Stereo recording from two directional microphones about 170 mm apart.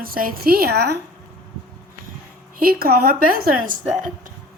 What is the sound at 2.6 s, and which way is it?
Speech, 60° right (ahead or behind).